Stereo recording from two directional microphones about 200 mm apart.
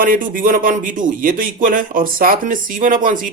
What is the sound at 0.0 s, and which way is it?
A man's voice, 45° right (ahead or behind).